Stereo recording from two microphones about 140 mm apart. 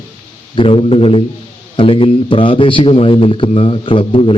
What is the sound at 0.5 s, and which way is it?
A man's voice, 40° left (ahead or behind).